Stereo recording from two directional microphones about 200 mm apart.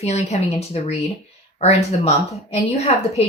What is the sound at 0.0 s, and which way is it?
Speech, 35° left (ahead or behind).